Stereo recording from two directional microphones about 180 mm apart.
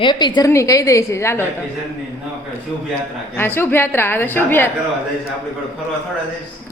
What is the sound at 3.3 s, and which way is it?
A woman's voice, 10° left (ahead or behind).